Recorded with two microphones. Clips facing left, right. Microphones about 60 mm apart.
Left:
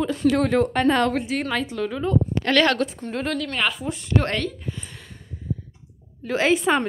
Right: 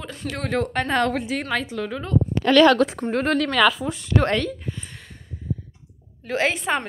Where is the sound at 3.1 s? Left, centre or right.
Right.